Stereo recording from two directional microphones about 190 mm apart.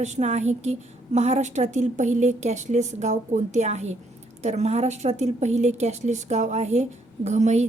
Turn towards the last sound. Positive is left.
turn(degrees=-35)  # may be behind; listen again after turning